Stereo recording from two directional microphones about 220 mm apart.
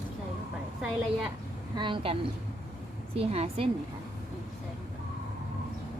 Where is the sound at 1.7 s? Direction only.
20° right (ahead or behind).